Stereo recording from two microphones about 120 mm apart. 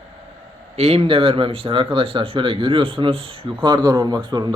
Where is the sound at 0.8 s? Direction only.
60° right (ahead or behind).